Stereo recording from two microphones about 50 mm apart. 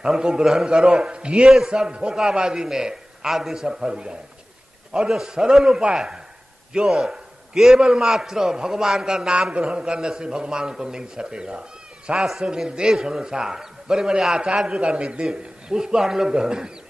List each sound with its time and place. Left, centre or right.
0.0 s a man's voice: centre